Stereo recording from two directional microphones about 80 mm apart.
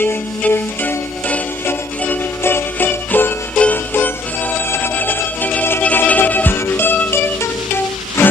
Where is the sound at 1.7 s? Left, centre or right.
Left.